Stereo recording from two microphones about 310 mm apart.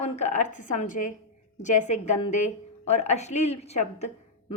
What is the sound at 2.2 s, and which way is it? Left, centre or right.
A woman's voice, left.